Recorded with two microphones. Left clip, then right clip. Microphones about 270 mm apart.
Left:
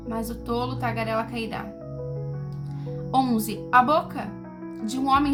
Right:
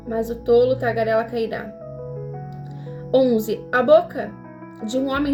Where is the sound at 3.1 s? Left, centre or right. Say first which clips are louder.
Right 7 dB; centre.